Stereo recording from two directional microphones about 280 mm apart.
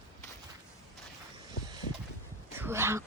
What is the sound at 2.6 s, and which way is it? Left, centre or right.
Whispering, centre.